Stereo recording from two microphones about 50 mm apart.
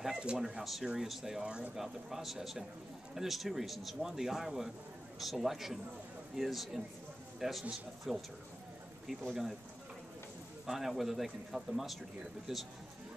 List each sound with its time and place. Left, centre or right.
0.0 s speech: centre
1.8 s a man's voice: centre
9.3 s speech: centre
10.7 s speech: centre